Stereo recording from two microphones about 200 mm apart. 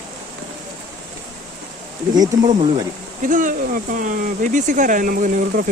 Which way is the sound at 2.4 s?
35° right (ahead or behind).